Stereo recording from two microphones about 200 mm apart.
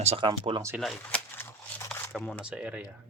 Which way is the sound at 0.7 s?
Centre (ahead or behind).